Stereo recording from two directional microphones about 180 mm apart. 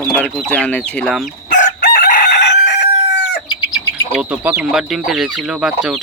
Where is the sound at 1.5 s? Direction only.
45° left (ahead or behind).